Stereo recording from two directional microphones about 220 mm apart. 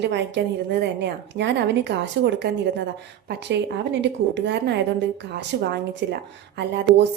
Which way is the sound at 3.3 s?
50° right (ahead or behind).